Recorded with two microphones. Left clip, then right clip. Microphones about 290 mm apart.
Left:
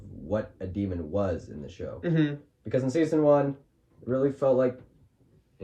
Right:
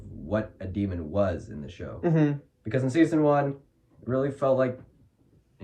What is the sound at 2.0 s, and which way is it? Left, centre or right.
Speech, right.